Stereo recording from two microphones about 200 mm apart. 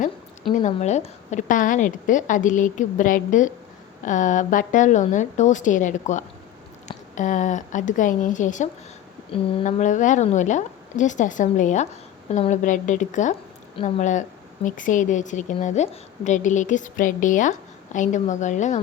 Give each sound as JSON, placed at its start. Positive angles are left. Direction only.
{"t": 0.5, "sound": "a woman's voice", "side_deg": 35}